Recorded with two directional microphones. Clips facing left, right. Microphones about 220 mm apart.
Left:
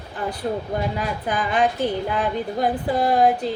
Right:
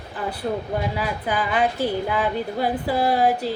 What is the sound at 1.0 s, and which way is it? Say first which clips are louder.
A woman's voice: even; 5° right (ahead or behind).